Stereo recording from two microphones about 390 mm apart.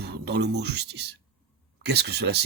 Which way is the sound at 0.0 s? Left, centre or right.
Right.